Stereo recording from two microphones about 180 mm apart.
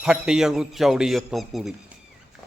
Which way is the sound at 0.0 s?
5° right (ahead or behind).